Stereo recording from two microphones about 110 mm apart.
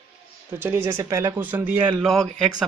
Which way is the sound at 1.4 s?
15° right (ahead or behind).